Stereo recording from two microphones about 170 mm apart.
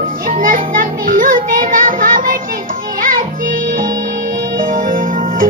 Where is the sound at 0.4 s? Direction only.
55° right (ahead or behind).